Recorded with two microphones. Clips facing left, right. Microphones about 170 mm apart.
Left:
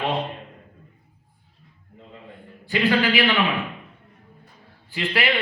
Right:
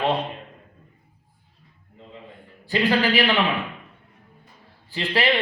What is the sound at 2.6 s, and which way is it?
Speech, 40° right (ahead or behind).